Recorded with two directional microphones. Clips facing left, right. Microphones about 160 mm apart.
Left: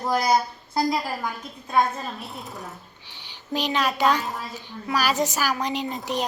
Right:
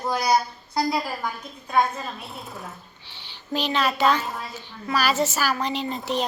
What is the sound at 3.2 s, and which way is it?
A woman's voice, 15° left (ahead or behind).